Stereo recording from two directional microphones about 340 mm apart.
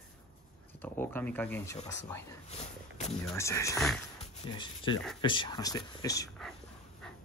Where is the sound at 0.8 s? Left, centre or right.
Centre.